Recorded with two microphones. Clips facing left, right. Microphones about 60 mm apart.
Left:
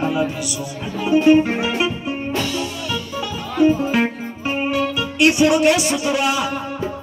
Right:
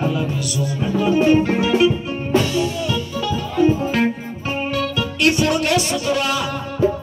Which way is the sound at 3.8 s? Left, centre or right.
Centre.